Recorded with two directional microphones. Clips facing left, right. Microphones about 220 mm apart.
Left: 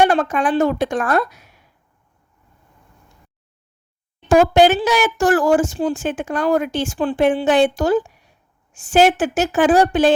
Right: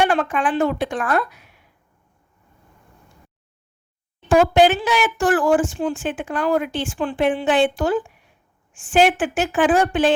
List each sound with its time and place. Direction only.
0.0 s speech: 40° left (ahead or behind)
4.3 s speech: 40° left (ahead or behind)